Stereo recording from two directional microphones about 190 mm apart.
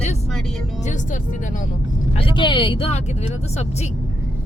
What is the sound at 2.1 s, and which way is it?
Speech, 25° left (ahead or behind).